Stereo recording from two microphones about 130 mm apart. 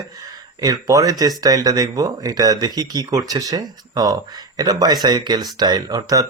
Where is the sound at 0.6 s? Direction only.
25° right (ahead or behind).